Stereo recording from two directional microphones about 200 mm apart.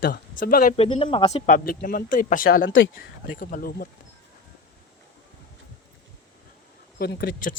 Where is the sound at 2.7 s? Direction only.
70° left (ahead or behind).